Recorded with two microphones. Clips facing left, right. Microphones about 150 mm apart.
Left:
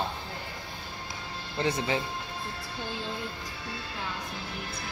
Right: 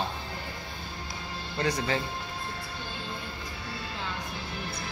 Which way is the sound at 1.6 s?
25° left (ahead or behind).